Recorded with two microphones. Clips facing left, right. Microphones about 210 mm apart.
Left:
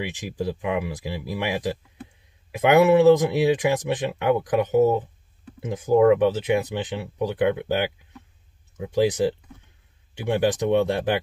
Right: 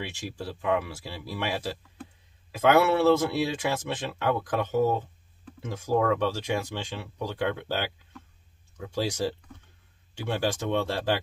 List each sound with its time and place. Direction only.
0.0 s speech: 15° left (ahead or behind)